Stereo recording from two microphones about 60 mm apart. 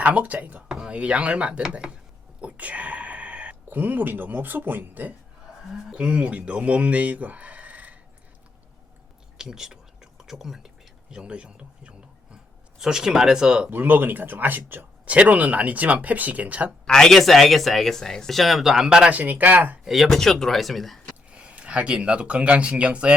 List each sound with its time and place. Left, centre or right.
0.0 s speech: right
2.4 s whispering: right
3.7 s speech: right
5.9 s speech: centre
9.4 s whispering: centre
11.1 s speech: centre
13.7 s speech: right
16.8 s speech: centre
19.1 s speech: right
19.8 s speech: centre
20.1 s speech: centre
21.2 s speech: centre